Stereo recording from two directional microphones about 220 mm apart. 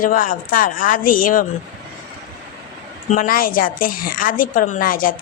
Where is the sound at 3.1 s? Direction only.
40° left (ahead or behind).